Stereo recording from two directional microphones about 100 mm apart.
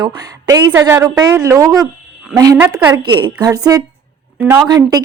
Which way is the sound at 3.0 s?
50° right (ahead or behind).